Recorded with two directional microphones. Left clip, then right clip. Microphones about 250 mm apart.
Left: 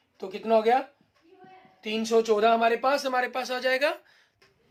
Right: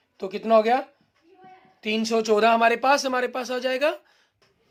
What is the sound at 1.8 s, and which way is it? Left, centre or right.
Speech, right.